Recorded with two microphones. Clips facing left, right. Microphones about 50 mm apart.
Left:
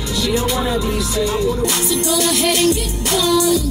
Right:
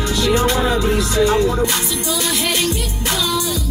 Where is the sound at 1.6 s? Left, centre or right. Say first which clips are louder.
Left 1 dB; right.